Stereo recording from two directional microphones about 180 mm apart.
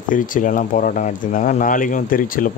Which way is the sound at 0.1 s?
50° left (ahead or behind).